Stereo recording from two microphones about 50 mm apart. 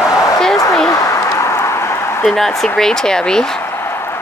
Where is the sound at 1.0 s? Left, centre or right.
Left.